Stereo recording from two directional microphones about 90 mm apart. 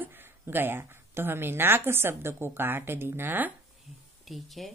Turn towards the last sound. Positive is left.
turn(degrees=0)  # may be behind; listen again after turning